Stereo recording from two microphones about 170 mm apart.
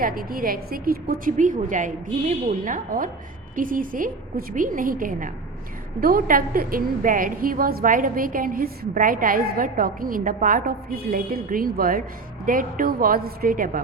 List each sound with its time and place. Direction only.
0.0 s a woman's voice: 60° right (ahead or behind)